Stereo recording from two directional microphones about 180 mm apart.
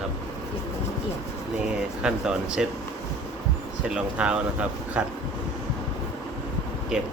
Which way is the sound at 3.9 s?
5° right (ahead or behind).